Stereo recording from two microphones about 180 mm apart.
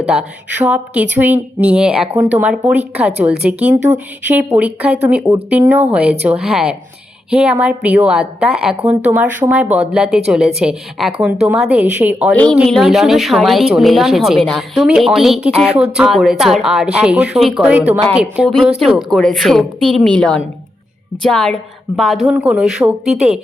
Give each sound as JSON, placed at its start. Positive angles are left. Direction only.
{"t": 0.0, "sound": "speech", "side_deg": -5}
{"t": 9.6, "sound": "speech", "side_deg": -40}
{"t": 9.9, "sound": "speech", "side_deg": -5}
{"t": 12.3, "sound": "speech", "side_deg": 5}